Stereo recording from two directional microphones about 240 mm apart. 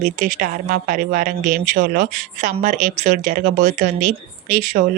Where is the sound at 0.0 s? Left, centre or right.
Right.